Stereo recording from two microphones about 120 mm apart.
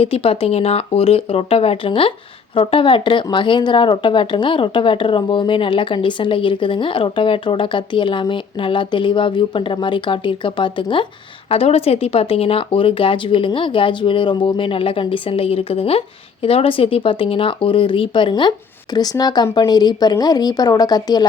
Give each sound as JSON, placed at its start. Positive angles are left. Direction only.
{"t": 0.0, "sound": "speech", "side_deg": 55}
{"t": 11.4, "sound": "a woman's voice", "side_deg": 55}